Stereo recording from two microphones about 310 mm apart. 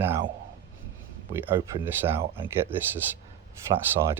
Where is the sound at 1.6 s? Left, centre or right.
Centre.